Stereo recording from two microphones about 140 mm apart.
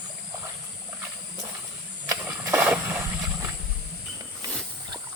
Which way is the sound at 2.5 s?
10° right (ahead or behind).